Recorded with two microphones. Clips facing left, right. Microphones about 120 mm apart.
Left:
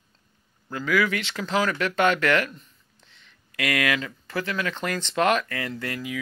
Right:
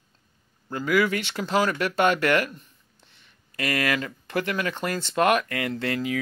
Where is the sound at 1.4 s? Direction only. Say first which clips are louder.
Right 2 dB; 25° right (ahead or behind).